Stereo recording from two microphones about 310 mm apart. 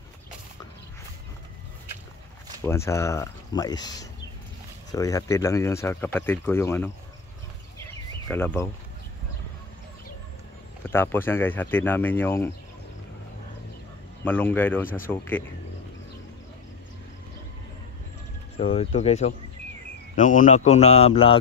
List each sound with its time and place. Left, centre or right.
2.6 s speech: centre
8.3 s speech: centre
10.9 s speech: centre
14.2 s speech: centre
18.6 s speech: centre